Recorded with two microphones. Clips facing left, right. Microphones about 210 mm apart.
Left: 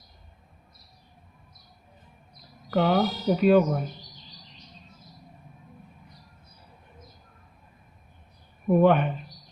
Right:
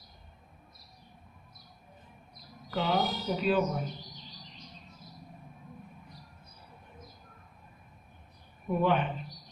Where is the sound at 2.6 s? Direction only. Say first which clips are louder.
Left 7 dB; 55° left (ahead or behind).